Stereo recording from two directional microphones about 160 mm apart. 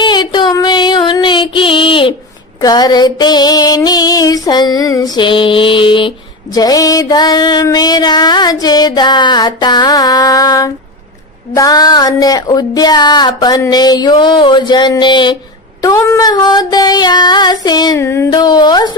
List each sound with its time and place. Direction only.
0.0 s child singing: 30° left (ahead or behind)
2.6 s female singing: 25° left (ahead or behind)